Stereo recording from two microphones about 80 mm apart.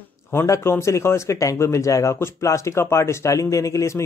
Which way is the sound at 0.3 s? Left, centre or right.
Left.